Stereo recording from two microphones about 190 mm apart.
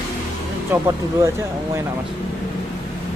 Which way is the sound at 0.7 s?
15° right (ahead or behind).